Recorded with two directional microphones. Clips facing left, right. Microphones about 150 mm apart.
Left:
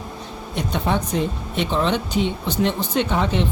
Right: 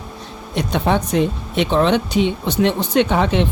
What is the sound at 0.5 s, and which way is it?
Speech, 70° right (ahead or behind).